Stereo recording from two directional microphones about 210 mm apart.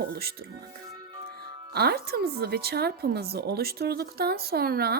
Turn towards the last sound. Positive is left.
turn(degrees=-45)  # may be behind; listen again after turning